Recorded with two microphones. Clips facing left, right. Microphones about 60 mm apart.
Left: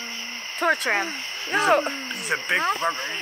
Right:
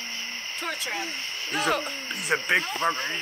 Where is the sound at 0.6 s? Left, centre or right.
Left.